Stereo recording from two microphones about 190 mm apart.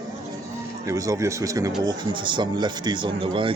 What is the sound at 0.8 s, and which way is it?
Speech, 15° right (ahead or behind).